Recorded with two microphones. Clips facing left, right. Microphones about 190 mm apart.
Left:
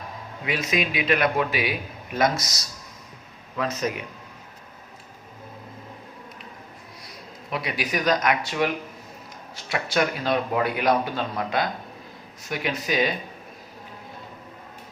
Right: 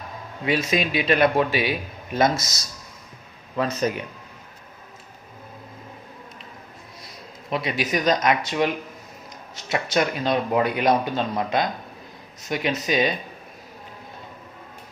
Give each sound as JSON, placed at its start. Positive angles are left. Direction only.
{"t": 0.4, "sound": "speech", "side_deg": -30}
{"t": 3.8, "sound": "speech", "side_deg": -35}
{"t": 7.5, "sound": "speech", "side_deg": -25}